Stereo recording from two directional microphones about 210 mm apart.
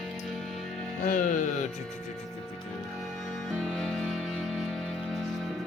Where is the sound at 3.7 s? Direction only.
Centre (ahead or behind).